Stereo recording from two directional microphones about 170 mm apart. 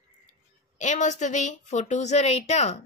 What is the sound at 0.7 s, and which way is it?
A woman's voice, 45° left (ahead or behind).